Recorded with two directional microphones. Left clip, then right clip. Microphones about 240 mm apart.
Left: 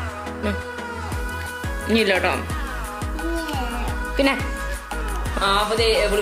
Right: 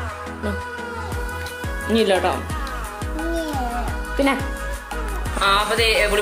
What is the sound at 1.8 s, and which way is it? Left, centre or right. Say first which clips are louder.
Speech: right 1 dB; centre.